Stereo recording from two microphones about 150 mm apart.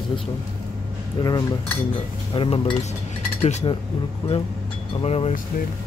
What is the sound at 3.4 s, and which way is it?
Speech, 50° left (ahead or behind).